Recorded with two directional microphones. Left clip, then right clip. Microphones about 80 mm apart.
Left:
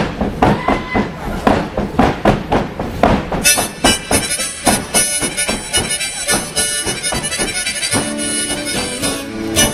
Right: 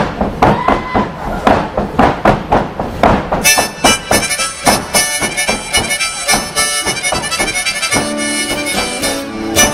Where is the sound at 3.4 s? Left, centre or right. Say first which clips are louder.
Right 3 dB; right.